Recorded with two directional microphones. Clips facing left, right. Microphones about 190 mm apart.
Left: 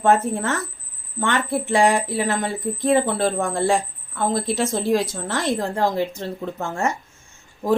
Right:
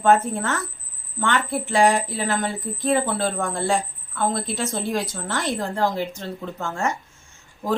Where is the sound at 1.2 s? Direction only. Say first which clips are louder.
Left 1 dB; 25° left (ahead or behind).